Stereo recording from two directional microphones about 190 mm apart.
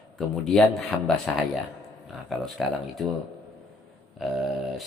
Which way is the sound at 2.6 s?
5° right (ahead or behind).